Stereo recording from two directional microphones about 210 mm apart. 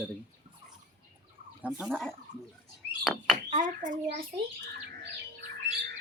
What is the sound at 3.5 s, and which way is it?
Speech, 35° right (ahead or behind).